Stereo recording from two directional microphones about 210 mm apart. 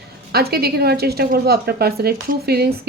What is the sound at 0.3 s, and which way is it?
Speech, 50° right (ahead or behind).